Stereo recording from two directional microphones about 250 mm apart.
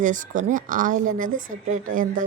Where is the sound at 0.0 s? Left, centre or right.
Right.